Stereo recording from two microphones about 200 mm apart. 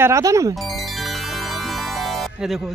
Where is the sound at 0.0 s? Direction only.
15° right (ahead or behind).